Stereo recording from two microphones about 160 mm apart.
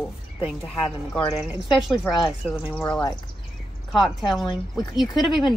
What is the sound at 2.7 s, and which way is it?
Speech, 10° left (ahead or behind).